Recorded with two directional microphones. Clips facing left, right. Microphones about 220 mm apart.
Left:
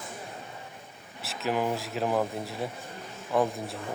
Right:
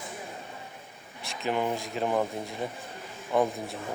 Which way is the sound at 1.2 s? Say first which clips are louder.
Even; 5° left (ahead or behind).